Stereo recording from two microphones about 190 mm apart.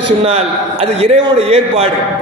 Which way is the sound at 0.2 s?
30° right (ahead or behind).